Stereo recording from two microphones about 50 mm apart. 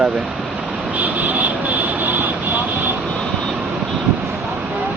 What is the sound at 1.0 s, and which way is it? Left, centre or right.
Vehicle, right.